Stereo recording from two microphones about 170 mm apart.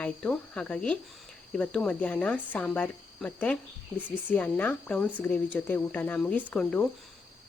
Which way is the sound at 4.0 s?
10° right (ahead or behind).